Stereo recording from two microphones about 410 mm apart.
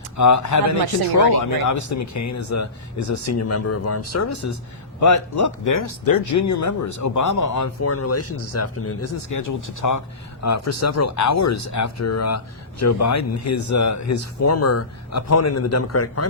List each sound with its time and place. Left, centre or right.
0.2 s speech: left